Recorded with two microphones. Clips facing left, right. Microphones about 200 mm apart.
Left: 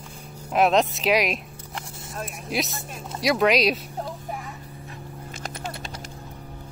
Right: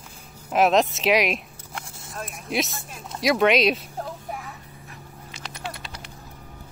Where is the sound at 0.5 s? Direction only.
Centre (ahead or behind).